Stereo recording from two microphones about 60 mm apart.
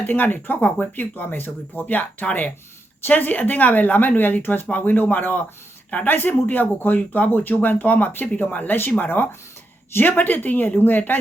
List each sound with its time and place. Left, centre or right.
0.0 s speech: left